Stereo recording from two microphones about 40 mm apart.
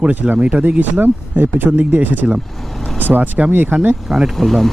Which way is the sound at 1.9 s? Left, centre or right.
Right.